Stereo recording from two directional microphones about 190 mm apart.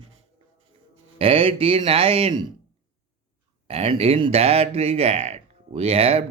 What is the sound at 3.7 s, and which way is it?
Speech, 30° right (ahead or behind).